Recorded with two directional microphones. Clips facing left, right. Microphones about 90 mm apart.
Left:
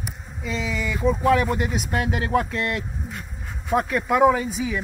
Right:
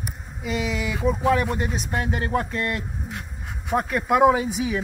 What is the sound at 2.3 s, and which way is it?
Speech, 15° right (ahead or behind).